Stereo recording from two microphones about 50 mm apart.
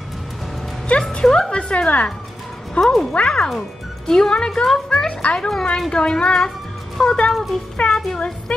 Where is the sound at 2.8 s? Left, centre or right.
Centre.